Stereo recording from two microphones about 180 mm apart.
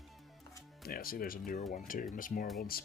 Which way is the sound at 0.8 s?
55° left (ahead or behind).